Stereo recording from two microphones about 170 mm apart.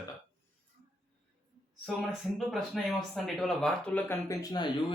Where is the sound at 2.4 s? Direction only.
Centre (ahead or behind).